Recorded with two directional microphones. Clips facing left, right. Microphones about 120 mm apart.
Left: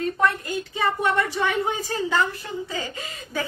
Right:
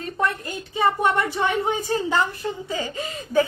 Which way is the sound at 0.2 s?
25° right (ahead or behind).